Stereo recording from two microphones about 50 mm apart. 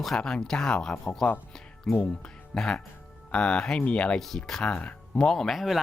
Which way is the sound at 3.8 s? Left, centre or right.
Left.